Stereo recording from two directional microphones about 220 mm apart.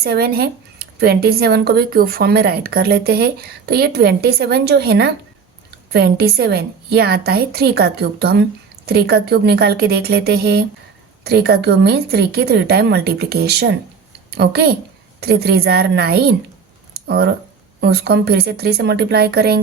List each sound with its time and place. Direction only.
0.0 s a woman's voice: 45° right (ahead or behind)
16.9 s a sound: 45° right (ahead or behind)
17.7 s speech: 50° right (ahead or behind)